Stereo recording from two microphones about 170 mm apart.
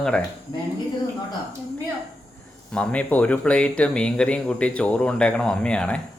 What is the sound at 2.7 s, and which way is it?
Speech, 5° left (ahead or behind).